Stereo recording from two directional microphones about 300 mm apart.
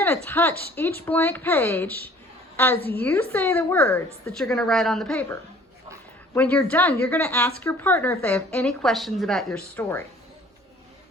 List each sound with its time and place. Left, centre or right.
0.0 s speech: centre
6.3 s speech: centre